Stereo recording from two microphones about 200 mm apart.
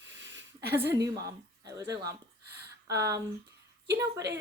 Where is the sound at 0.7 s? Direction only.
10° right (ahead or behind).